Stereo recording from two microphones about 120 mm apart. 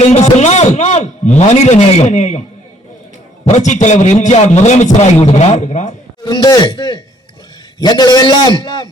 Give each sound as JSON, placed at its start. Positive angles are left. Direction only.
{"t": 0.0, "sound": "a man's voice", "side_deg": 70}
{"t": 3.4, "sound": "a man's voice", "side_deg": 80}
{"t": 5.2, "sound": "a man's voice", "side_deg": 65}
{"t": 6.2, "sound": "a man's voice", "side_deg": 35}